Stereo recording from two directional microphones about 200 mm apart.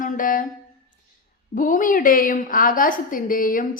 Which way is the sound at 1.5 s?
40° left (ahead or behind).